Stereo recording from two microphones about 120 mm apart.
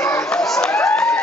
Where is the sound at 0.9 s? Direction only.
10° left (ahead or behind).